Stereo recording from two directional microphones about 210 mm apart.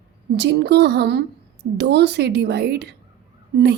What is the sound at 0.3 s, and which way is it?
A woman's voice, 55° right (ahead or behind).